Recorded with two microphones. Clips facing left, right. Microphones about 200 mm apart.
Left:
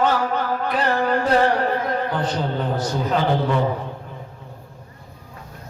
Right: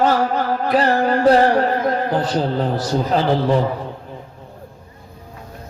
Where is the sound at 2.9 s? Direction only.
35° right (ahead or behind).